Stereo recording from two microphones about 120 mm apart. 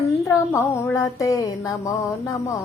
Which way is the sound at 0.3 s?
20° left (ahead or behind).